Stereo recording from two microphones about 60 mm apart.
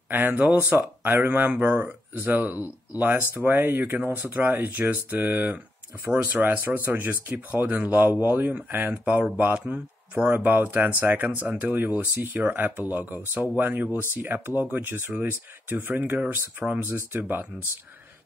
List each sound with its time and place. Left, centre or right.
0.1 s speech: right
3.9 s speech: right
8.9 s speech: centre
16.8 s speech: right